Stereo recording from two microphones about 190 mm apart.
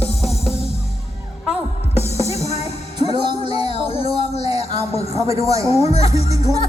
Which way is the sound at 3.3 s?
30° left (ahead or behind).